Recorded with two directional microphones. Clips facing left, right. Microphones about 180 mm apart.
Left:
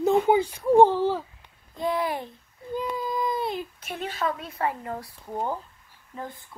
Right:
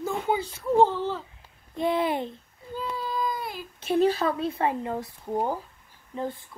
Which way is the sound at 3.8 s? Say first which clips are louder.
Right 12 dB; 30° right (ahead or behind).